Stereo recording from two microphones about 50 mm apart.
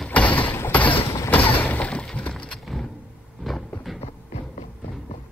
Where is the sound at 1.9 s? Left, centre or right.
Centre.